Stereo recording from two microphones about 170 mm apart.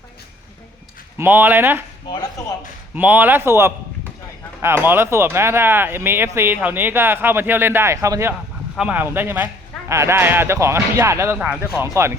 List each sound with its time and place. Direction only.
1.2 s speech: 10° right (ahead or behind)
2.9 s speech: 10° right (ahead or behind)
8.7 s speech: 5° right (ahead or behind)